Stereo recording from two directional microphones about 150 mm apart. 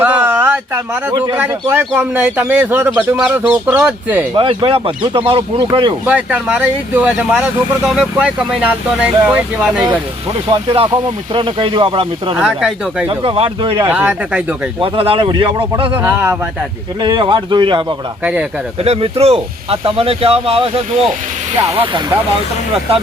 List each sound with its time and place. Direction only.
0.0 s a sound: 10° right (ahead or behind)
1.4 s speech: 15° right (ahead or behind)
4.4 s speech: 35° right (ahead or behind)
6.1 s speech: 10° right (ahead or behind)
10.9 s speech: 30° right (ahead or behind)
12.4 s speech: centre (ahead or behind)
13.1 s speech: 40° right (ahead or behind)
13.9 s speech: 10° right (ahead or behind)
14.8 s speech: 40° right (ahead or behind)
16.0 s speech: 15° right (ahead or behind)
17.0 s speech: 30° right (ahead or behind)
18.2 s speech: 5° right (ahead or behind)
18.8 s speech: 40° right (ahead or behind)